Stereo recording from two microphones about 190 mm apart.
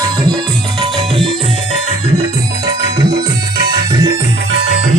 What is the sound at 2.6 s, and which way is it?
Music, 60° right (ahead or behind).